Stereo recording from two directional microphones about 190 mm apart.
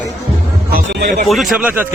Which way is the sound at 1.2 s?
Centre (ahead or behind).